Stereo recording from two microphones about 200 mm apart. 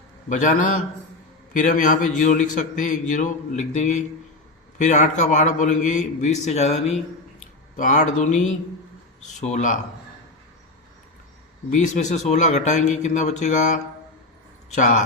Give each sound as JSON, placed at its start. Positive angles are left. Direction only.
{"t": 0.3, "sound": "a man's voice", "side_deg": 40}
{"t": 11.7, "sound": "a man's voice", "side_deg": 35}
{"t": 14.8, "sound": "a man's voice", "side_deg": 35}